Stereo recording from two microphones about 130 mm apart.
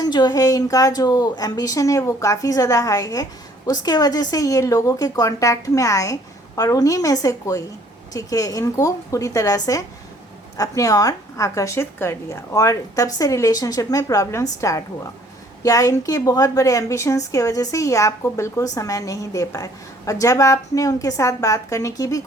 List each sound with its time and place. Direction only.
0.0 s a woman's voice: 35° left (ahead or behind)